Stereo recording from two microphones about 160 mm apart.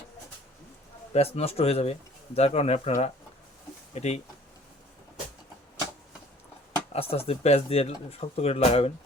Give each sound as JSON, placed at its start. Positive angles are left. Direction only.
{"t": 1.1, "sound": "speech", "side_deg": 40}
{"t": 6.9, "sound": "speech", "side_deg": 40}